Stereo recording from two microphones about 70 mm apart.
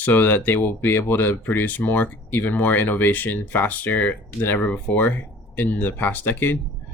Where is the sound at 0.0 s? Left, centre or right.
Left.